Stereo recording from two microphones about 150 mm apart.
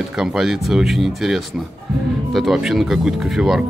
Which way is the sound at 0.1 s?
5° right (ahead or behind).